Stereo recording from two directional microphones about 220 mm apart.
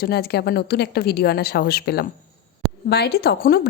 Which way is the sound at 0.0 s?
45° left (ahead or behind).